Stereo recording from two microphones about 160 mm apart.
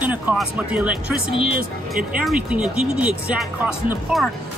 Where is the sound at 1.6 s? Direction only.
65° right (ahead or behind).